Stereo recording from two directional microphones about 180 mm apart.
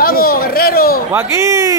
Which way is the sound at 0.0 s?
55° left (ahead or behind).